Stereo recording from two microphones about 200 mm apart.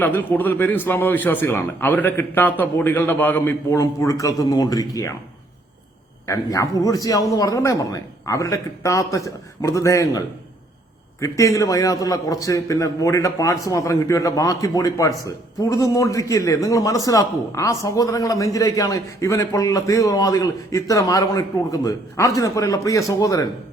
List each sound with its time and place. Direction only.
0.0 s a man's voice: 10° left (ahead or behind)
6.2 s a man's voice: 15° left (ahead or behind)